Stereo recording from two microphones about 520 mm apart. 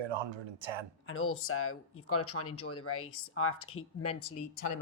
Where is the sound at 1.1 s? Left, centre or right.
Left.